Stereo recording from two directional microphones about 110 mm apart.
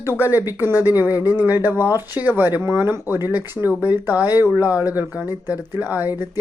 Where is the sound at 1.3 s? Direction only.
15° right (ahead or behind).